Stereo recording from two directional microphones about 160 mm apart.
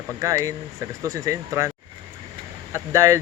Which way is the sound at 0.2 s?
20° right (ahead or behind).